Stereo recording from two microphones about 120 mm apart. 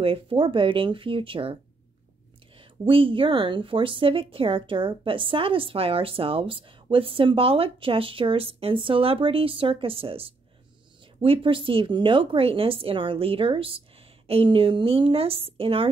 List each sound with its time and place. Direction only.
0.0 s a woman's voice: 50° right (ahead or behind)
2.9 s a woman's voice: 45° right (ahead or behind)